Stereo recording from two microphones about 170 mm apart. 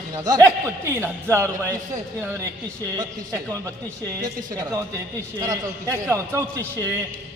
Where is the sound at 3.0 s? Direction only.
20° right (ahead or behind).